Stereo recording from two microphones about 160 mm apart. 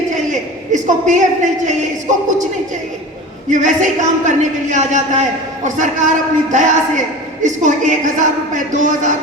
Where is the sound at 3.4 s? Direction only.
50° right (ahead or behind).